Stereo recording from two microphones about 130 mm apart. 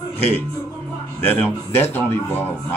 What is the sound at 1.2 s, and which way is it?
A man's voice, 15° left (ahead or behind).